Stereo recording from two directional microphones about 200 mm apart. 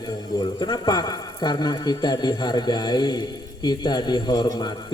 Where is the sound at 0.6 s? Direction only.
20° left (ahead or behind).